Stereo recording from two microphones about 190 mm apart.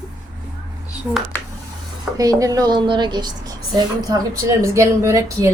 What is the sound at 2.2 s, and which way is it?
A woman's voice, 15° right (ahead or behind).